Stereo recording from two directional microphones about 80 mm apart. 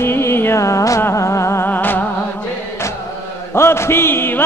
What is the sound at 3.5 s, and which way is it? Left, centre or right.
Music, left.